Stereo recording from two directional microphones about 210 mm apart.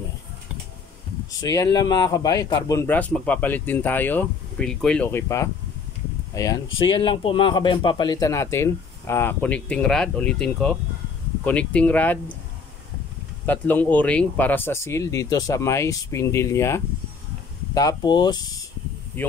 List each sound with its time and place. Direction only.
1.4 s a man's voice: 15° left (ahead or behind)
13.5 s a man's voice: 10° left (ahead or behind)